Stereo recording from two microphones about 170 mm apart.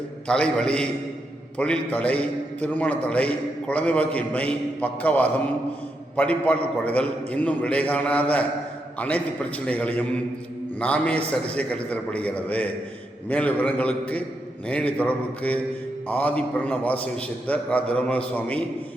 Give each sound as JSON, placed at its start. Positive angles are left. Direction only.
{"t": 0.3, "sound": "a man's voice", "side_deg": 5}